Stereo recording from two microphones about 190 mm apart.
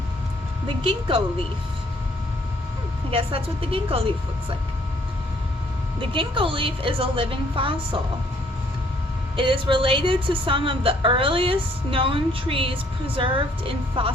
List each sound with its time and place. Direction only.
3.1 s a woman's voice: 30° right (ahead or behind)
6.0 s a woman's voice: 25° right (ahead or behind)
9.3 s a woman's voice: 25° right (ahead or behind)